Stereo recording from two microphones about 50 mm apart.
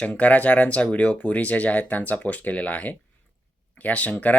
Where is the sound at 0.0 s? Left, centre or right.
Left.